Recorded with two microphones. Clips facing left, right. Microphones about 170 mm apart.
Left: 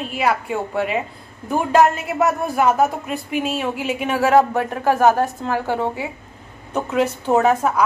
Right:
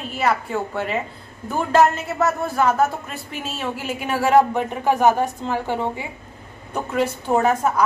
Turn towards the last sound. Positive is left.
turn(degrees=0)  # may be behind; listen again after turning